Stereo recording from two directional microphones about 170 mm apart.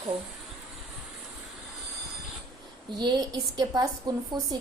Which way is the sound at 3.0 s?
25° right (ahead or behind).